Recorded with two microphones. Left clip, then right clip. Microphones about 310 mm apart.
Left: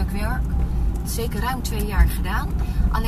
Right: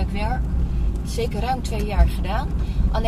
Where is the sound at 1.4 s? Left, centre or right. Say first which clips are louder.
Right 2 dB; right.